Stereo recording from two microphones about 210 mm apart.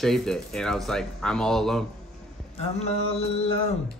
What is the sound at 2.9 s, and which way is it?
Mantra, 30° left (ahead or behind).